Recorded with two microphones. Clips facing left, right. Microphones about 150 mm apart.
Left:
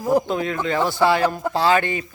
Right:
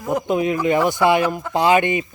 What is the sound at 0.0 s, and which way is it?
Speech, 35° left (ahead or behind).